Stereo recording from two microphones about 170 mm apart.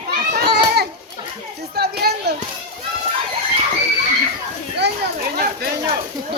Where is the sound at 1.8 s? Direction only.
70° right (ahead or behind).